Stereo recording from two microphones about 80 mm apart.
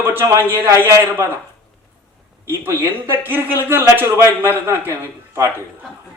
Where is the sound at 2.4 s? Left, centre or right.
Right.